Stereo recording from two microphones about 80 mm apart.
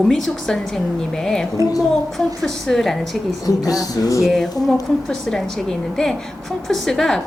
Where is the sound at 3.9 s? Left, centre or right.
Left.